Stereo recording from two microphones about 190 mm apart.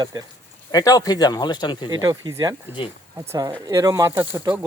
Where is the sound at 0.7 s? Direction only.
20° left (ahead or behind).